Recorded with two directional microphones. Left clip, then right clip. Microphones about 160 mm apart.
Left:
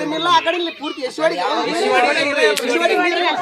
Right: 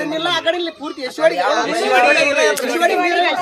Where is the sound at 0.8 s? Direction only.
45° right (ahead or behind).